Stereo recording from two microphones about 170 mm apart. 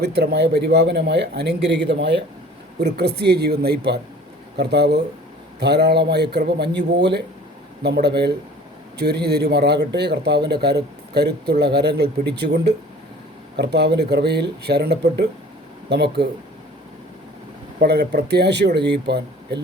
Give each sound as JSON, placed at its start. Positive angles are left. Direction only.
{"t": 0.0, "sound": "a man's voice", "side_deg": -75}
{"t": 2.7, "sound": "speech", "side_deg": -75}
{"t": 7.8, "sound": "speech", "side_deg": -70}
{"t": 17.7, "sound": "a man's voice", "side_deg": -75}